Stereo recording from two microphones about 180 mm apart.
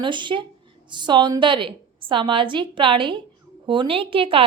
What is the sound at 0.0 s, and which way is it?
A woman's voice, 25° right (ahead or behind).